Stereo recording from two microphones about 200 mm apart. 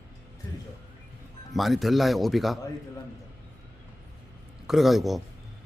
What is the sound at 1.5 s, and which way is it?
A man's voice, centre (ahead or behind).